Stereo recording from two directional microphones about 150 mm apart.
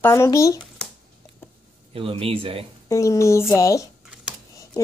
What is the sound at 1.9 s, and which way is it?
Speech, 40° right (ahead or behind).